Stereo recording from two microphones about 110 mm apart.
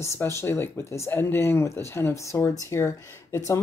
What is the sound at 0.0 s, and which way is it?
Speech, 25° left (ahead or behind).